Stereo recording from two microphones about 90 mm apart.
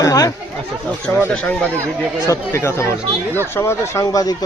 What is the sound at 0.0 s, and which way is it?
Chatter, 40° left (ahead or behind).